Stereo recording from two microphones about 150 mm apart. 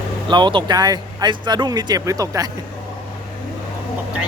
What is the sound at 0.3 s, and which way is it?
A man's voice, 30° right (ahead or behind).